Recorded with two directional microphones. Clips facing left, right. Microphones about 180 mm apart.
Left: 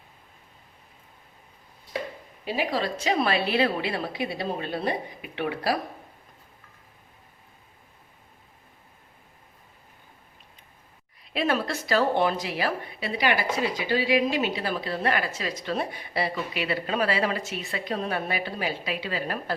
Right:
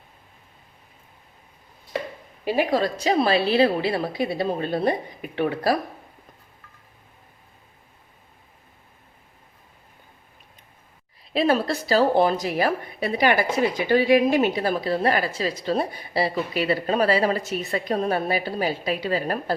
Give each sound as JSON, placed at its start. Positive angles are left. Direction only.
{"t": 2.4, "sound": "a woman's voice", "side_deg": -55}
{"t": 11.3, "sound": "a woman's voice", "side_deg": -35}